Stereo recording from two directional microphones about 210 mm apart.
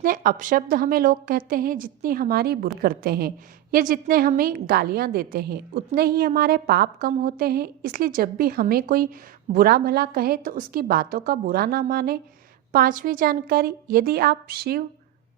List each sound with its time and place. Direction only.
0.0 s a woman's voice: 40° right (ahead or behind)